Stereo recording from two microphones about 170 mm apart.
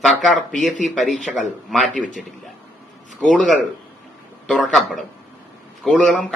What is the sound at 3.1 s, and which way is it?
Speech, centre (ahead or behind).